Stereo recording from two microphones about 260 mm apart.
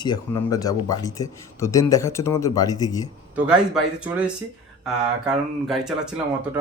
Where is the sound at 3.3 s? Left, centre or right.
Centre.